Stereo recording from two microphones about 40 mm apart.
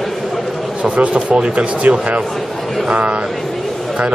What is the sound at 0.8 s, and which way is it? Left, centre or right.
Speech, right.